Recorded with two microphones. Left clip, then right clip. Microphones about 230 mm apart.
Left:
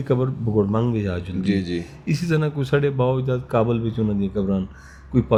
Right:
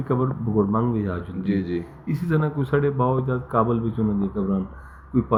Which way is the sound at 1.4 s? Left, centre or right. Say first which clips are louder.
Left 1 dB; left.